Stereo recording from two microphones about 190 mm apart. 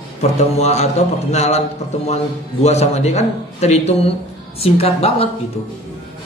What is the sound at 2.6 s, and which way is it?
A man's voice, 35° left (ahead or behind).